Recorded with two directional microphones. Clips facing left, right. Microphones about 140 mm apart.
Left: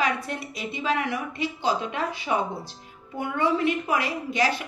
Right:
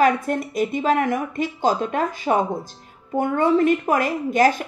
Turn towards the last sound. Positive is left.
turn(degrees=-45)  # may be behind; listen again after turning